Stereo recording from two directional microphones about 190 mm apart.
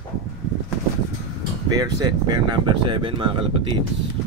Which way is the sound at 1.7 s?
20° right (ahead or behind).